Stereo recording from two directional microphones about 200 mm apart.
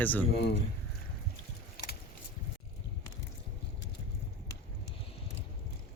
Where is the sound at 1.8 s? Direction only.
50° left (ahead or behind).